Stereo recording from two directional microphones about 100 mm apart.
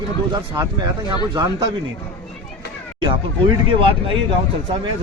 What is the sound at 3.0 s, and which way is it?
Speech, 55° right (ahead or behind).